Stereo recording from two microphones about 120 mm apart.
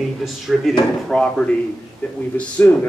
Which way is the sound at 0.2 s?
Centre (ahead or behind).